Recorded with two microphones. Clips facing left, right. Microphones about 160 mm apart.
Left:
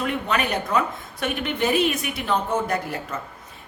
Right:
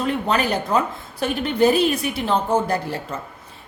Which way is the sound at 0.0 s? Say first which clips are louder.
Right 3 dB; 30° right (ahead or behind).